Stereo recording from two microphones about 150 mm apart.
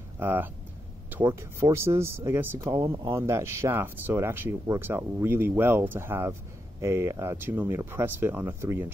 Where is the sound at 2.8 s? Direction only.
35° right (ahead or behind).